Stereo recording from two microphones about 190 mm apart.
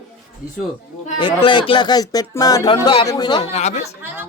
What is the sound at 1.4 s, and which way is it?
Speech, 25° left (ahead or behind).